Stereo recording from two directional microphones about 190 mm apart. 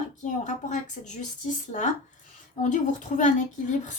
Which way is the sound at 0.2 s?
40° left (ahead or behind).